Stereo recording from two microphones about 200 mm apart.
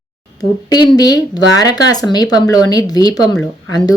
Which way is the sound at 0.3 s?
20° left (ahead or behind).